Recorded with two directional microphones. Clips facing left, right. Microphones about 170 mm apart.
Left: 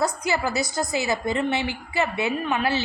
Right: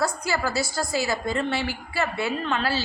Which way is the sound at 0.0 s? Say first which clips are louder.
Left 2 dB; 20° left (ahead or behind).